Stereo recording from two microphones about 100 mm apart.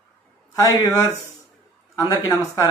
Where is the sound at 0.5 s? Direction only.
35° left (ahead or behind).